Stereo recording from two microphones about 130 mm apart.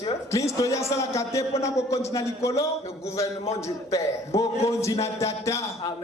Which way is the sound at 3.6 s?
25° left (ahead or behind).